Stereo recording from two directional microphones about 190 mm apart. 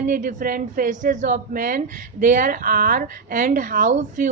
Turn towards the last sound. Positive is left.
turn(degrees=-45)  # may be behind; listen again after turning